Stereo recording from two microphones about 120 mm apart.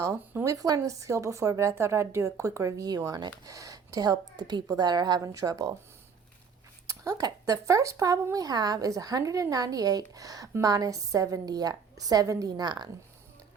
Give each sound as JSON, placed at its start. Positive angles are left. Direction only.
{"t": 0.4, "sound": "a woman's voice", "side_deg": -30}
{"t": 6.8, "sound": "a woman's voice", "side_deg": -30}